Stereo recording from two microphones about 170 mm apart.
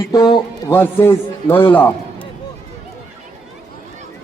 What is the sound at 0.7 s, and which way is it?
A man's voice, 10° left (ahead or behind).